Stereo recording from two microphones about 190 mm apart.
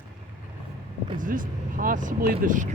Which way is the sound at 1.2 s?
45° right (ahead or behind).